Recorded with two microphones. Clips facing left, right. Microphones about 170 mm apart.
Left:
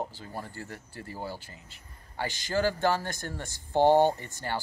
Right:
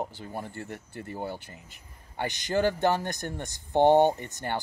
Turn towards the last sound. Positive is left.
turn(degrees=-20)  # may be behind; listen again after turning